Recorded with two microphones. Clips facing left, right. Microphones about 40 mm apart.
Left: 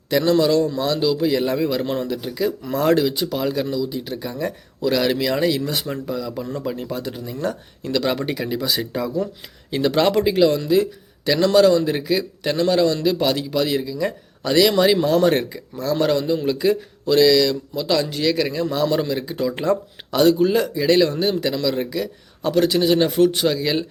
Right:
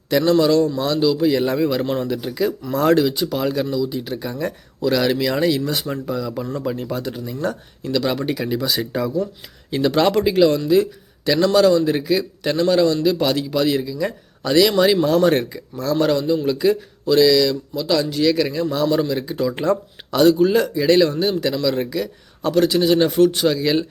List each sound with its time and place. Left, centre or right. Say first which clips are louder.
0.1 s speech: right 1 dB; centre
1.3 s speech: right 2 dB; centre
2.7 s speech: right 2 dB; centre
7.0 s speech: right 2 dB; centre
7.9 s speech: right 1 dB; left
8.4 s speech: right 1 dB; centre
12.9 s speech: right 2 dB; centre
13.2 s speech: right 2 dB; centre
15.4 s speech: right 1 dB; centre; by 18.2 s left
18.2 s speech: right 2 dB; centre
21.2 s speech: right 1 dB; centre
21.6 s speech: right 1 dB; centre; by 23.5 s left
23.5 s speech: right 2 dB; centre